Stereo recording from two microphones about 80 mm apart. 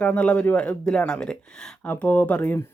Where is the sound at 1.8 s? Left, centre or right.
Left.